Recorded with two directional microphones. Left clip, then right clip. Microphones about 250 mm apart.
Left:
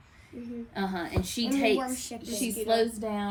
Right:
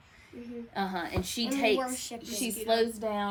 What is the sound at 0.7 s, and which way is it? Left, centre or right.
A woman's voice, centre.